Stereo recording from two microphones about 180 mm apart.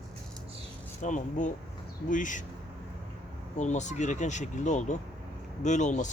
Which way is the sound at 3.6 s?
40° left (ahead or behind).